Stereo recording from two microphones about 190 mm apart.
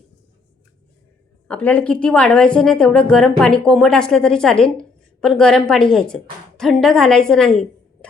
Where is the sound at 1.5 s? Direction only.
10° left (ahead or behind).